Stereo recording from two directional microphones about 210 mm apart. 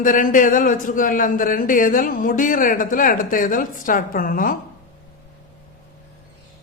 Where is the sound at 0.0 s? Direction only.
40° left (ahead or behind).